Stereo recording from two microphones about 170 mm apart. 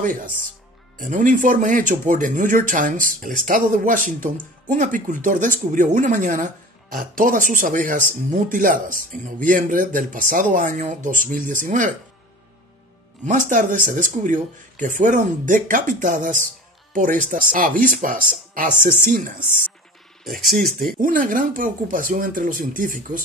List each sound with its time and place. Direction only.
0.0 s speech: 55° right (ahead or behind)
13.2 s speech: 50° right (ahead or behind)
21.0 s speech: 50° right (ahead or behind)